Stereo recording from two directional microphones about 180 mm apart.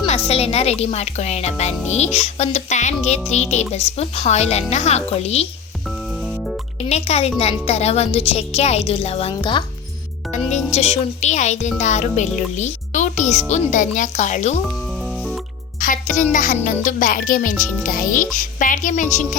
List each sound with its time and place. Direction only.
0.0 s a woman's voice: 35° left (ahead or behind)
6.2 s music: centre (ahead or behind)
6.8 s a woman's voice: 35° left (ahead or behind)
10.7 s a woman's voice: 35° left (ahead or behind)
15.0 s music: centre (ahead or behind)
15.8 s a child's voice: 45° left (ahead or behind)